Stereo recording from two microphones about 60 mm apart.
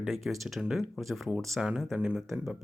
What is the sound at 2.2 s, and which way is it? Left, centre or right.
Speech, centre.